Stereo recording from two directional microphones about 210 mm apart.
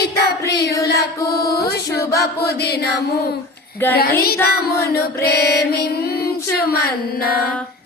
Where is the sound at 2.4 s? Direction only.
50° left (ahead or behind).